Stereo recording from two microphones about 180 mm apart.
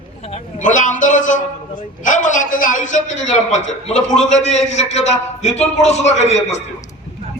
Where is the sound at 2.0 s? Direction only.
45° left (ahead or behind).